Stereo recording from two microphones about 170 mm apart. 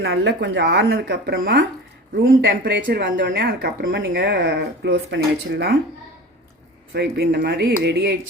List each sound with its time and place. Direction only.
0.0 s speech: 75° right (ahead or behind)
2.8 s speech: 60° right (ahead or behind); by 5.7 s 90° right
6.9 s speech: 80° right